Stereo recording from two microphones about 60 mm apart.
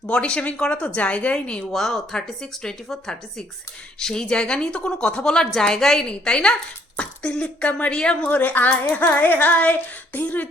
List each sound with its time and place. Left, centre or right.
0.1 s speech: centre
1.7 s a woman's voice: centre
8.3 s speech: left